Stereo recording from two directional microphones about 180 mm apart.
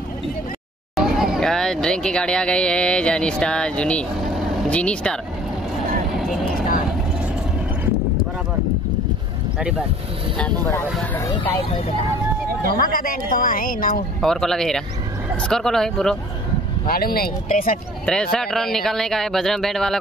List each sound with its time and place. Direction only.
0.9 s speech: centre (ahead or behind)
6.1 s vehicle: centre (ahead or behind)
9.6 s speech: 5° right (ahead or behind)
11.1 s speech: 15° left (ahead or behind)
12.7 s speech: 55° left (ahead or behind)
14.2 s speech: centre (ahead or behind)
16.8 s speech: 55° left (ahead or behind)
18.0 s speech: 5° left (ahead or behind)